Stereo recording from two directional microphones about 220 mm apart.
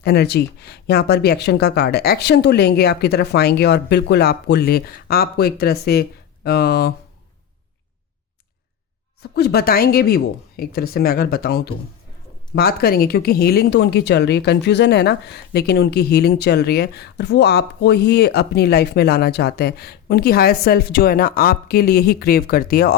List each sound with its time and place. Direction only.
0.0 s speech: 45° left (ahead or behind)
9.3 s speech: 45° left (ahead or behind)